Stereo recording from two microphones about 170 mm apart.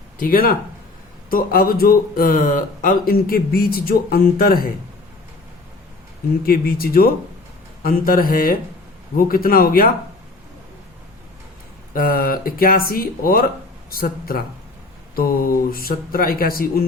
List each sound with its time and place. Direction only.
0.2 s speech: 55° left (ahead or behind)
6.4 s speech: 60° left (ahead or behind)
11.9 s speech: 55° left (ahead or behind)